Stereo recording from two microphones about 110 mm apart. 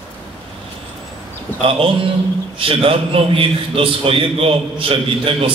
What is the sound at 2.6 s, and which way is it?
A man's voice, 55° right (ahead or behind).